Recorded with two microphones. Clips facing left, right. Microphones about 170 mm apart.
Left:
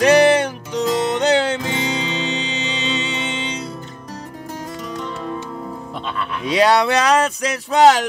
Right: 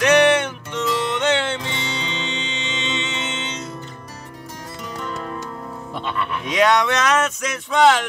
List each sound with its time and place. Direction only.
0.0 s music: 35° left (ahead or behind)
6.4 s speech: 35° left (ahead or behind)